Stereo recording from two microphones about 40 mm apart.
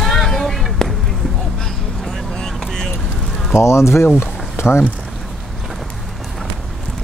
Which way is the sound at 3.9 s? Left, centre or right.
Left.